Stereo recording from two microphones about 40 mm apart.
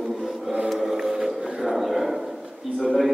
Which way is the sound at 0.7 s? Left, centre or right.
Centre.